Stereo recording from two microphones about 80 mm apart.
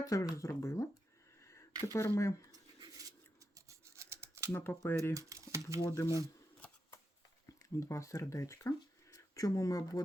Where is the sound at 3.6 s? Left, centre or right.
Right.